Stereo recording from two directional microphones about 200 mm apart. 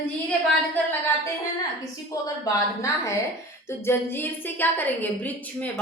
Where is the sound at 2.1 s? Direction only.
15° left (ahead or behind).